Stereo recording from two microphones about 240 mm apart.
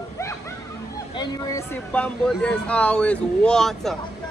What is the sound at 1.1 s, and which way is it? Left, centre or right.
Speech, centre.